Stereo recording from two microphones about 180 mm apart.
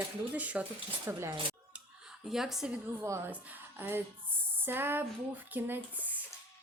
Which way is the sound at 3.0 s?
15° right (ahead or behind).